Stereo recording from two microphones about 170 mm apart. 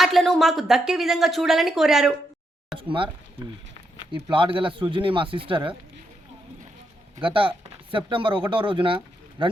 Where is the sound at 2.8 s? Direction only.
30° right (ahead or behind).